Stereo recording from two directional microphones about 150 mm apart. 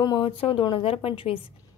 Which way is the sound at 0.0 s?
30° left (ahead or behind).